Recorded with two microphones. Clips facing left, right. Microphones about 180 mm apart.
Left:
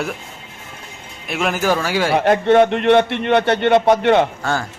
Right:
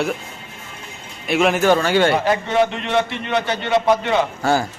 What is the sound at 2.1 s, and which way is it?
A man's voice, 60° left (ahead or behind).